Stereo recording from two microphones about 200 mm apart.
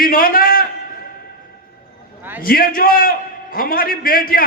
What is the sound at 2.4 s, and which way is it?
A man's voice, 45° left (ahead or behind).